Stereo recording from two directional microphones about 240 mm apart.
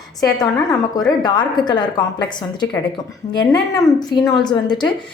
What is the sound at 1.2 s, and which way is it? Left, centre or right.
A woman's voice, centre.